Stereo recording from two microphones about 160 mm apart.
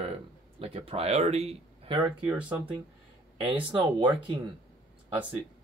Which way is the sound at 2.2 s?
10° right (ahead or behind).